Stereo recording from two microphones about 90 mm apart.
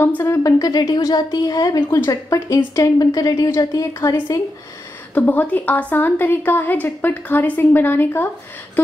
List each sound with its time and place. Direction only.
0.2 s a woman's voice: 35° left (ahead or behind)
5.1 s a woman's voice: 20° left (ahead or behind)